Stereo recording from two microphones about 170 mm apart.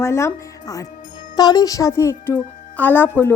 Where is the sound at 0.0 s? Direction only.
15° left (ahead or behind).